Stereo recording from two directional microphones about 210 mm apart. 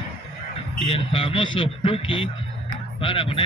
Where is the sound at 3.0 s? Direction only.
25° left (ahead or behind).